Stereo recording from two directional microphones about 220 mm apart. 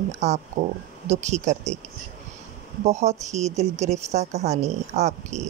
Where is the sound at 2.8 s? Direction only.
30° right (ahead or behind).